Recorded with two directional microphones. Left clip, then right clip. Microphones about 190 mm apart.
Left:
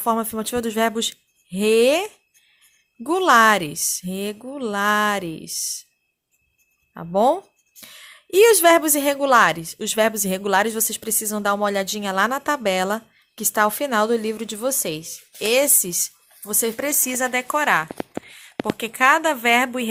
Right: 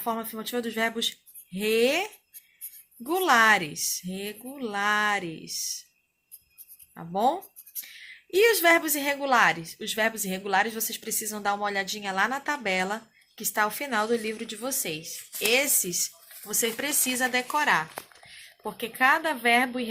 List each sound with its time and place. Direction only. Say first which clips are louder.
0.0 s speech: left 9 dB; 60° left (ahead or behind)
6.9 s speech: left 7 dB; 50° left (ahead or behind)
17.2 s speech: left 4 dB; 35° left (ahead or behind)